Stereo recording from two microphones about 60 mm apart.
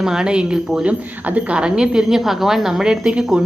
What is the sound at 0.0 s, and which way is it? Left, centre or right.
A woman's voice, centre.